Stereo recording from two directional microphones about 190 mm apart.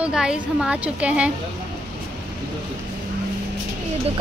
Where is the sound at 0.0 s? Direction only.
5° right (ahead or behind).